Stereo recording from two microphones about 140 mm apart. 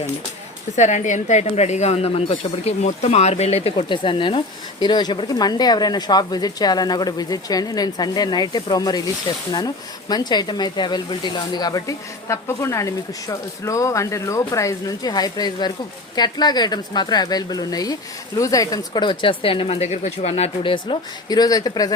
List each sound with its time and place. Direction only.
0.8 s speech: 60° left (ahead or behind)
20.7 s speech: 35° left (ahead or behind)